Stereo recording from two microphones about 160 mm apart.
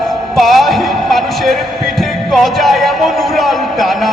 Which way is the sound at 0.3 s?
Centre (ahead or behind).